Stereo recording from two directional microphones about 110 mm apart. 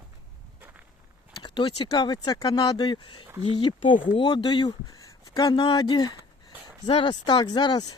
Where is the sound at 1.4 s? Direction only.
40° left (ahead or behind).